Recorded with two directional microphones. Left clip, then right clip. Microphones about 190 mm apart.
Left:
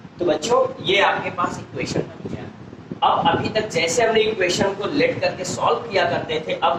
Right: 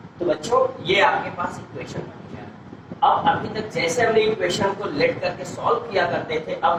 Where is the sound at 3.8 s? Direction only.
30° left (ahead or behind).